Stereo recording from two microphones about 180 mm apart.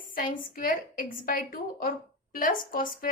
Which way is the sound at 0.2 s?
50° left (ahead or behind).